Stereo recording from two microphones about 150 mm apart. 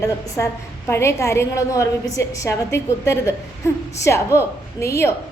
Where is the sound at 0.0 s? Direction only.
20° left (ahead or behind).